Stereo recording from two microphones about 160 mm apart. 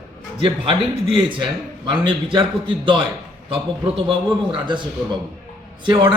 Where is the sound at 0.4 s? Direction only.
35° right (ahead or behind).